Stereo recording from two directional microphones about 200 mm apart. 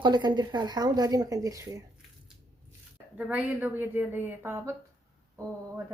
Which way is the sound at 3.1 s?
5° right (ahead or behind).